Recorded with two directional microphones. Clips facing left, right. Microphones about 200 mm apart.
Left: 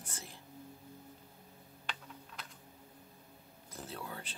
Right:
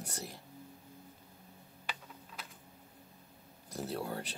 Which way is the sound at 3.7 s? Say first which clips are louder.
Right 7 dB; 40° right (ahead or behind).